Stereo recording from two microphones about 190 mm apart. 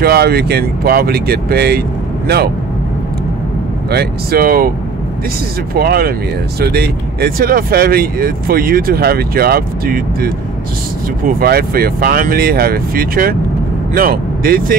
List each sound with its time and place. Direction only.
0.0 s speech: 55° right (ahead or behind)
3.9 s speech: 55° right (ahead or behind)
5.8 s speech: 55° right (ahead or behind)